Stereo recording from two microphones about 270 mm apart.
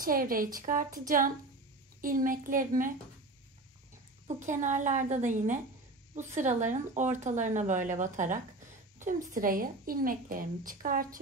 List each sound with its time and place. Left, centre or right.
0.0 s a woman's voice: right
4.3 s a woman's voice: right